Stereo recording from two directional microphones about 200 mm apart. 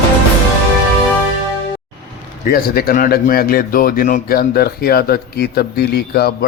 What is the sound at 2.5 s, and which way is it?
A man's voice, 50° left (ahead or behind).